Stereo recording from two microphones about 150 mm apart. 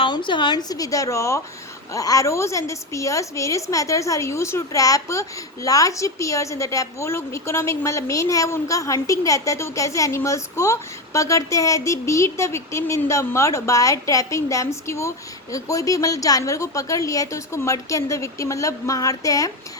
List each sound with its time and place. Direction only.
0.0 s a woman's voice: 30° left (ahead or behind)